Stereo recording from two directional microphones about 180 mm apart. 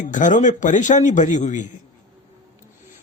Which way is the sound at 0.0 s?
45° left (ahead or behind).